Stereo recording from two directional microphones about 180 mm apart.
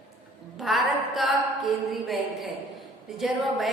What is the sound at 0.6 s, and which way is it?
A woman's voice, centre (ahead or behind).